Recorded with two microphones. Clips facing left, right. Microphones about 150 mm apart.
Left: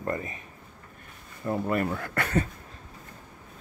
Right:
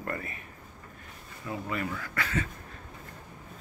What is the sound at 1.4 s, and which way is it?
Speech, 50° left (ahead or behind).